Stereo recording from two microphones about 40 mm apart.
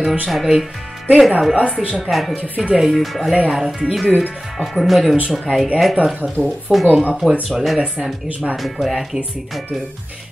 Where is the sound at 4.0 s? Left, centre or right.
Right.